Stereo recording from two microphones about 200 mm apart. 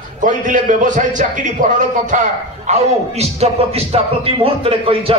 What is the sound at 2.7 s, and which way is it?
A man's voice, 30° right (ahead or behind).